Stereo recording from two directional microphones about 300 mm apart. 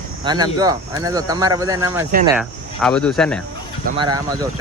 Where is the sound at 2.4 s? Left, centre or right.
Centre.